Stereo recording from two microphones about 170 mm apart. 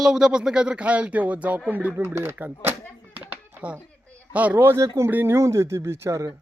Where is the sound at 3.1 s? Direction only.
10° right (ahead or behind).